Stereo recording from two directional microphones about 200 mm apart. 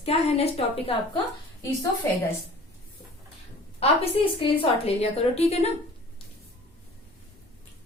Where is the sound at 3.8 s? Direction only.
30° left (ahead or behind).